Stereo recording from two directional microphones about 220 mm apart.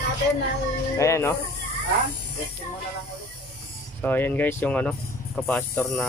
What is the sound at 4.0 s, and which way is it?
Speech, 10° left (ahead or behind).